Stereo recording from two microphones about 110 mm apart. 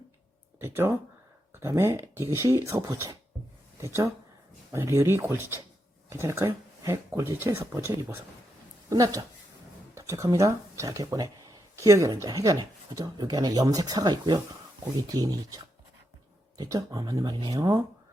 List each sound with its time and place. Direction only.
0.6 s speech: 20° right (ahead or behind)